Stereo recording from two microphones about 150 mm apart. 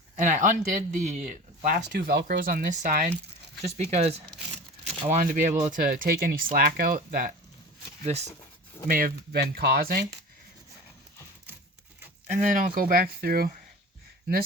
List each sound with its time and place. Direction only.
0.2 s speech: 55° right (ahead or behind)
3.9 s speech: 45° right (ahead or behind)
5.0 s speech: 55° right (ahead or behind)
8.0 s speech: 45° right (ahead or behind)
8.9 s speech: 70° right (ahead or behind); by 10.2 s 90° right
12.3 s speech: 65° right (ahead or behind); by 13.5 s 85° right